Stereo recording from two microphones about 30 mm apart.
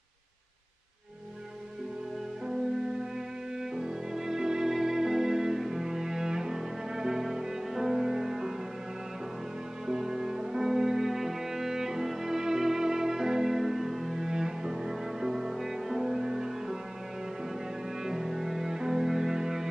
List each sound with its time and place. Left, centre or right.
2.4 s music: centre
5.6 s cello: centre
9.8 s music: centre
18.0 s cello: centre